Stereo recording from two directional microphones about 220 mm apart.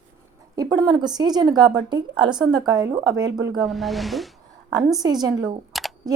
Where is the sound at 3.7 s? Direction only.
Centre (ahead or behind).